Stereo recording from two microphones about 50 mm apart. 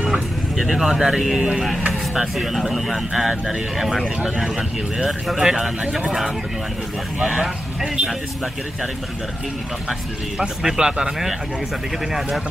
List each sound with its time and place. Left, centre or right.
0.6 s speech: centre
10.4 s speech: centre